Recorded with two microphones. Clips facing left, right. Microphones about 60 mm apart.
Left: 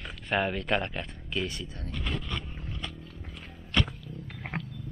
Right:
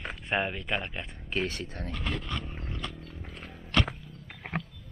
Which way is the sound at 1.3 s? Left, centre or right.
Right.